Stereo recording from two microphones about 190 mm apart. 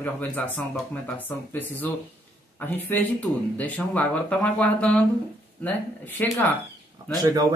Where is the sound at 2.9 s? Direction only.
10° left (ahead or behind).